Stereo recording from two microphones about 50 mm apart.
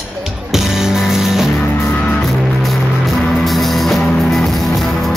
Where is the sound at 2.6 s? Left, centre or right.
Centre.